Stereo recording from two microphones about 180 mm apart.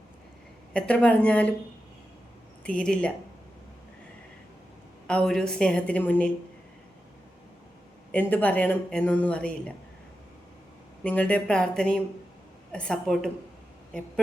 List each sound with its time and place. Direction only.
0.7 s speech: 5° left (ahead or behind)
2.6 s a woman's voice: 5° left (ahead or behind)
5.0 s a woman's voice: 5° left (ahead or behind)
8.1 s speech: 10° left (ahead or behind)
11.0 s a woman's voice: 5° left (ahead or behind)